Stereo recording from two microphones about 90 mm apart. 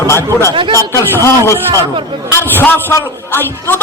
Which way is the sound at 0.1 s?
25° left (ahead or behind).